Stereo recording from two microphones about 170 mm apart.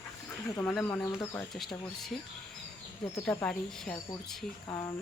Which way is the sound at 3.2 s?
5° left (ahead or behind).